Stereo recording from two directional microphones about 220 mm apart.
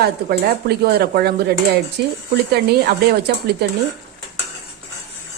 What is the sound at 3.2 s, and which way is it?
Speech, 50° right (ahead or behind).